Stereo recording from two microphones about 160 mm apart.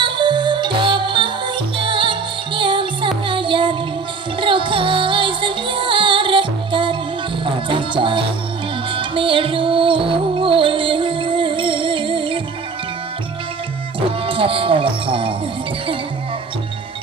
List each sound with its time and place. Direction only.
0.0 s music: 30° right (ahead or behind)
3.2 s child singing: 30° right (ahead or behind)
4.4 s music: 30° right (ahead or behind)
14.3 s music: 35° right (ahead or behind)